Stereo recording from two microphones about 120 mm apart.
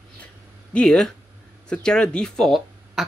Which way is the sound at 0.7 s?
5° left (ahead or behind).